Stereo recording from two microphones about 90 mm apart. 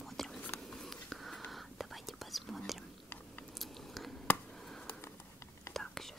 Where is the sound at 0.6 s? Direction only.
5° left (ahead or behind).